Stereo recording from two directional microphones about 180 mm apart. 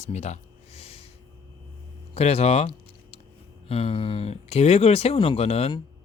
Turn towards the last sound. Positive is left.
turn(degrees=35)  # may be behind; listen again after turning